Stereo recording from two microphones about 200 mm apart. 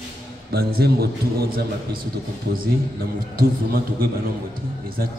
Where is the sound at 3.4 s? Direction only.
45° right (ahead or behind).